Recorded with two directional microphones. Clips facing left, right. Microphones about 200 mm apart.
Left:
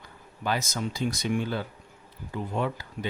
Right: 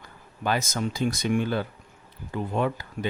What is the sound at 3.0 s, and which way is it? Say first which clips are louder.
Speech: right 3 dB; 45° right (ahead or behind).